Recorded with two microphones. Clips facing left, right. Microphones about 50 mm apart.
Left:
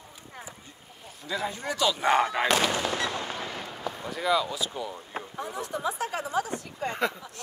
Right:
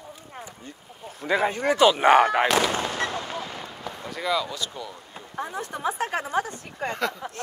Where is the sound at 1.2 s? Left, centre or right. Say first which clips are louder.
Right 9 dB; right.